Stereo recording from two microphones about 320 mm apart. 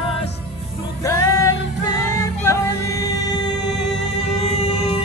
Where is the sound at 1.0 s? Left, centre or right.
Centre.